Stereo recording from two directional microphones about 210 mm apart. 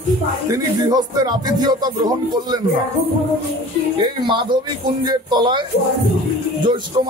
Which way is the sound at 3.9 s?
25° right (ahead or behind).